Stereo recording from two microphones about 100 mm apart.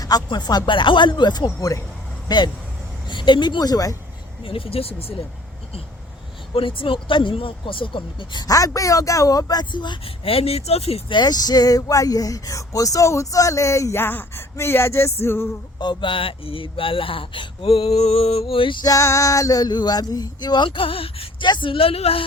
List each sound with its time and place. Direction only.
0.0 s speech: 45° left (ahead or behind)
4.4 s speech: 65° left (ahead or behind)
6.5 s speech: 60° left (ahead or behind)
10.2 s speech: 80° left
11.1 s speech: 45° left (ahead or behind); by 15.1 s 25° left (ahead or behind)
15.2 s music: 25° left (ahead or behind)
15.8 s speech: 50° left (ahead or behind)
18.8 s speech: 35° left (ahead or behind)
20.7 s speech: 65° left (ahead or behind)
21.4 s speech: 50° left (ahead or behind); by 22.2 s 75° left (ahead or behind)